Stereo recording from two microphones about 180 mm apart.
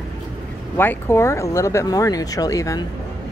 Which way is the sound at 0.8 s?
15° left (ahead or behind).